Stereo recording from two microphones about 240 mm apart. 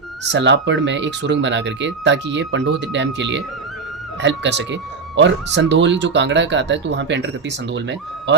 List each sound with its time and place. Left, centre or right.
0.3 s speech: right